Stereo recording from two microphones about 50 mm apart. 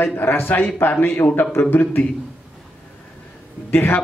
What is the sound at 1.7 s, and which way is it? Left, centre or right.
Speech, left.